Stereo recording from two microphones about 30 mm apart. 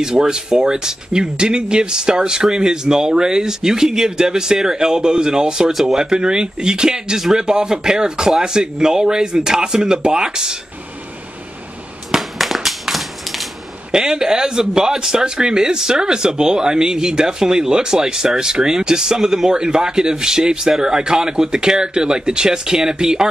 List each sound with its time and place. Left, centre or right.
0.0 s speech: right
5.7 s speech: centre
5.9 s speech: right
12.1 s a sound: centre
13.9 s speech: right